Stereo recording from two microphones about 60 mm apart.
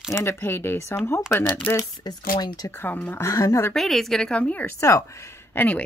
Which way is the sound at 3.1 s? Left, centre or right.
Left.